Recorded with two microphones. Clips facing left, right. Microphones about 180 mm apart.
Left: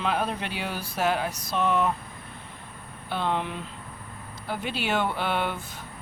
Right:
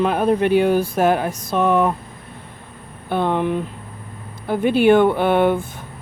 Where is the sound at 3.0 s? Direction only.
55° right (ahead or behind).